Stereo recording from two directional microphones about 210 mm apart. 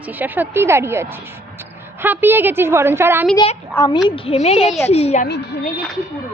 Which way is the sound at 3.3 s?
20° left (ahead or behind).